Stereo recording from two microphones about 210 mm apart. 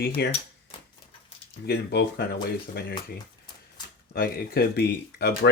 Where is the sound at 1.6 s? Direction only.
50° left (ahead or behind).